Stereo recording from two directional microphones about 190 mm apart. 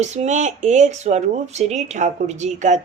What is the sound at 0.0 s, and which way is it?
Speech, 35° right (ahead or behind).